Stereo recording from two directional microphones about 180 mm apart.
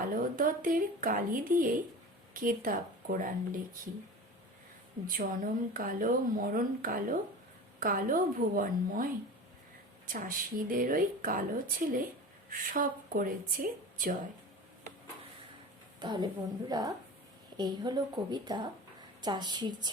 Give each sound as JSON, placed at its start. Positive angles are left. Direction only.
{"t": 0.1, "sound": "speech", "side_deg": -50}
{"t": 5.0, "sound": "speech", "side_deg": -50}
{"t": 10.1, "sound": "a woman's voice", "side_deg": -50}
{"t": 16.0, "sound": "a woman's voice", "side_deg": -25}